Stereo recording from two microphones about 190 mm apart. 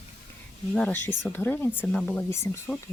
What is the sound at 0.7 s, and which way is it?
Speech, 5° left (ahead or behind).